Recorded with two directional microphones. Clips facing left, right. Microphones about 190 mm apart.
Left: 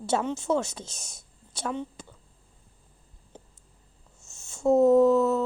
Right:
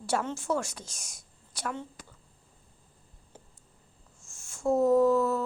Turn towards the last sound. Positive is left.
turn(degrees=20)  # may be behind; listen again after turning